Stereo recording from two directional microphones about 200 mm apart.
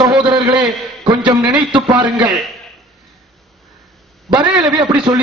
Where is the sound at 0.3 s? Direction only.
20° right (ahead or behind).